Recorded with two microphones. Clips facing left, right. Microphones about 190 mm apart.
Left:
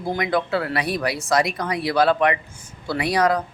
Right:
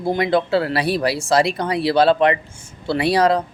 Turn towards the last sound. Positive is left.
turn(degrees=-30)  # may be behind; listen again after turning